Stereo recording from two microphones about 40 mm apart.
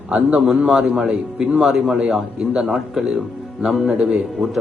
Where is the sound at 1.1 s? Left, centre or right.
Right.